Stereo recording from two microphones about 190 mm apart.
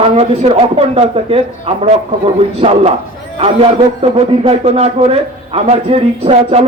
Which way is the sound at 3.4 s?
30° right (ahead or behind).